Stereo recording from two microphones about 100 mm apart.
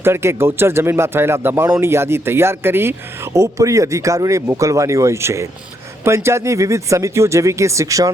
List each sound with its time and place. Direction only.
0.0 s speech: 25° right (ahead or behind)